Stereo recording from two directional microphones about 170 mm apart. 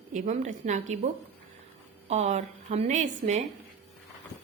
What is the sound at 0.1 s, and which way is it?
Speech, 45° right (ahead or behind).